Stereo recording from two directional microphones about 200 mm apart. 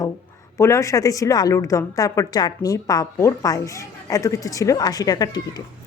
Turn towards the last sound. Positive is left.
turn(degrees=20)  # may be behind; listen again after turning